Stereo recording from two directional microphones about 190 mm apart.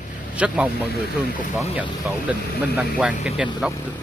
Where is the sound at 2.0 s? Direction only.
Centre (ahead or behind).